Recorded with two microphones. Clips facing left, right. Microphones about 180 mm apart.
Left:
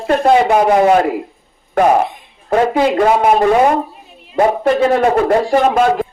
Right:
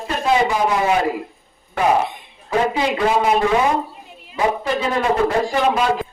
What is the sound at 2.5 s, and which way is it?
A woman's voice, 55° left (ahead or behind).